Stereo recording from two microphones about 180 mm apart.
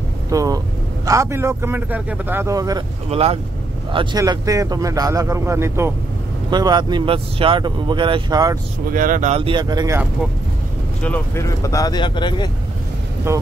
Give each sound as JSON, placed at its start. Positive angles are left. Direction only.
{"t": 0.3, "sound": "speech", "side_deg": -20}
{"t": 3.1, "sound": "speech", "side_deg": -35}
{"t": 8.9, "sound": "speech", "side_deg": -50}
{"t": 11.0, "sound": "speech", "side_deg": 10}
{"t": 13.3, "sound": "speech", "side_deg": -15}